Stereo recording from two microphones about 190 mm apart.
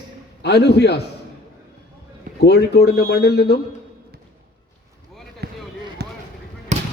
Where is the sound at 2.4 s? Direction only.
60° left (ahead or behind).